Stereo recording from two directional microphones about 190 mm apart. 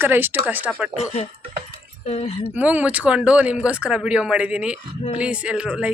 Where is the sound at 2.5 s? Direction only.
5° right (ahead or behind).